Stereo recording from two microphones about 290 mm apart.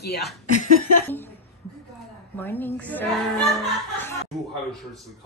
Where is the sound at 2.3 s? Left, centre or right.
Centre.